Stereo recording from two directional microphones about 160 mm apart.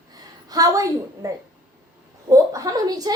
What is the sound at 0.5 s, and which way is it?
Speech, 20° right (ahead or behind).